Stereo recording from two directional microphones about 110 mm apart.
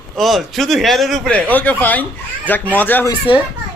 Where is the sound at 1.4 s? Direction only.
15° left (ahead or behind).